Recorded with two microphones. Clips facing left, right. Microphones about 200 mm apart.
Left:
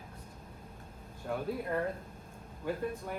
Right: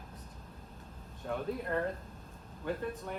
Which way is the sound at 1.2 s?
5° left (ahead or behind).